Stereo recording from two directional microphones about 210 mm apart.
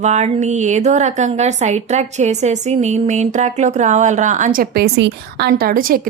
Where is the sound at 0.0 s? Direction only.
35° right (ahead or behind).